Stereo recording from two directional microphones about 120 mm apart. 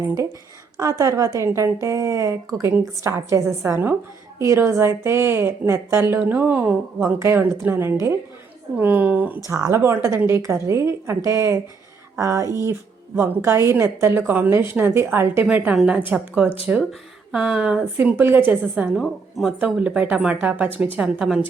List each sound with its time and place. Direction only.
0.0 s a woman's voice: 25° right (ahead or behind)
9.5 s a woman's voice: 25° right (ahead or behind); by 21.4 s 5° right (ahead or behind)